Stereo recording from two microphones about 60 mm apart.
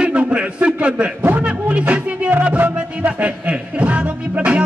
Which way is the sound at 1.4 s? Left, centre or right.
Right.